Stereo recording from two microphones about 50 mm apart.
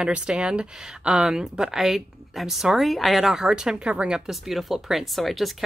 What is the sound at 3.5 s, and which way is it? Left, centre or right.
Speech, centre.